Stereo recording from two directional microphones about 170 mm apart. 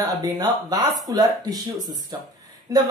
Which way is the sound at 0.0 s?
20° right (ahead or behind).